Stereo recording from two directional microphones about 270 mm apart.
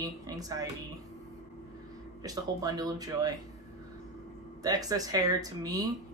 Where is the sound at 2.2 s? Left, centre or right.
Centre.